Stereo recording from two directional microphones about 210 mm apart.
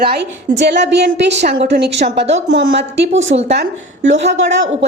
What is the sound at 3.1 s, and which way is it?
Speech, 30° right (ahead or behind).